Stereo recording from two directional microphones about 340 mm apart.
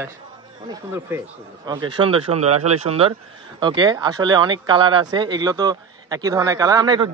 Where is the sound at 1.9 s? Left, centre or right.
Centre.